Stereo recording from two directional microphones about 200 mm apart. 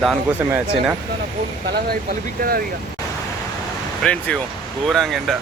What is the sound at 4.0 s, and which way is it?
Speech, 5° left (ahead or behind).